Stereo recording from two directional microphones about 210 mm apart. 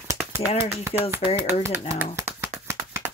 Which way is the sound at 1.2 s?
25° left (ahead or behind).